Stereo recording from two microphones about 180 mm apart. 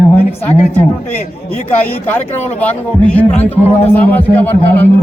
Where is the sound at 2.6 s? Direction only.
5° left (ahead or behind).